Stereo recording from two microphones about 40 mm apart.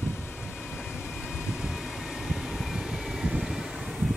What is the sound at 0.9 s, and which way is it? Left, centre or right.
Vehicle, centre.